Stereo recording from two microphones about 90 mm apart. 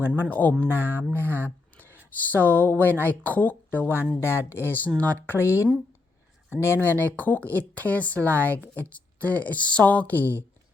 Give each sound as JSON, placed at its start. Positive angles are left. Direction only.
{"t": 0.2, "sound": "speech", "side_deg": 20}